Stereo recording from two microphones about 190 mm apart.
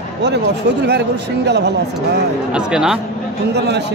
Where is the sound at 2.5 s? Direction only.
5° right (ahead or behind).